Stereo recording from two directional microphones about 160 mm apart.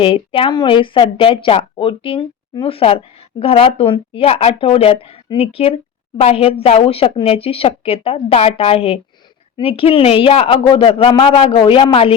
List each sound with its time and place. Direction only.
0.0 s speech: 35° left (ahead or behind)